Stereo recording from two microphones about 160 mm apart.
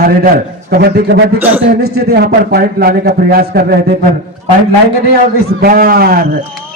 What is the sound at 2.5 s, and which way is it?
A man's voice, 70° right (ahead or behind).